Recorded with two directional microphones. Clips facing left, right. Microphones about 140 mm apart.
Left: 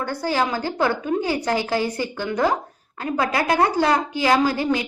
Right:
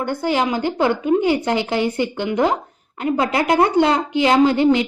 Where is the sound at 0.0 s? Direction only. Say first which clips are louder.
Right 3 dB; 20° right (ahead or behind).